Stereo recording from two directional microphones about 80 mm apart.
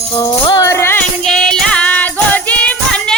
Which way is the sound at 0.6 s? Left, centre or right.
Left.